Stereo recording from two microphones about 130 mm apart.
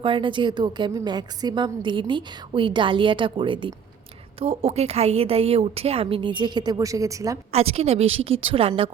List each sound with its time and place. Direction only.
0.0 s a woman's voice: 40° right (ahead or behind)
4.4 s a woman's voice: 50° right (ahead or behind); by 7.3 s 25° right (ahead or behind)
7.5 s a woman's voice: 50° right (ahead or behind)